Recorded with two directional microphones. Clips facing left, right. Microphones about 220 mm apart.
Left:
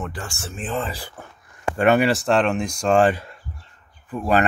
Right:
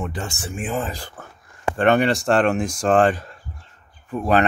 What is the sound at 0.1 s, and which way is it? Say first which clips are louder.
Speech: right 4 dB; 20° right (ahead or behind).